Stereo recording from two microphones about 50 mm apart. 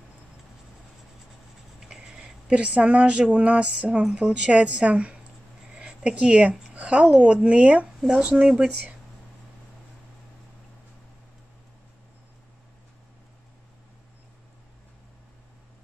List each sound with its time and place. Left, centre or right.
1.8 s speech: centre
5.8 s a sound: centre
6.7 s speech: right
8.1 s speech: centre